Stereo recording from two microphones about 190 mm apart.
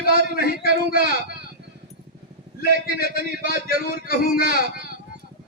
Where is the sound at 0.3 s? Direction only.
50° left (ahead or behind).